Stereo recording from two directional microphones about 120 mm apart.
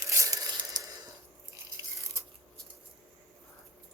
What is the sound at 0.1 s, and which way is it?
Tearing, 25° right (ahead or behind).